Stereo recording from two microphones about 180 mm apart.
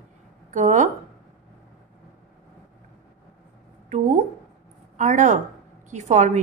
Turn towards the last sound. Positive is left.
turn(degrees=-40)  # may be behind; listen again after turning